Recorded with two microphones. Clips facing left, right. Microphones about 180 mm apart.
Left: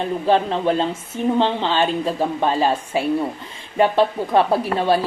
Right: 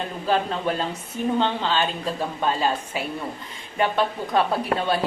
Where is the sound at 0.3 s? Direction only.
30° left (ahead or behind).